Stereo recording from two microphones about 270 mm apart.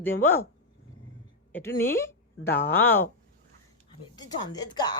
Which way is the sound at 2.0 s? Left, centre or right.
Centre.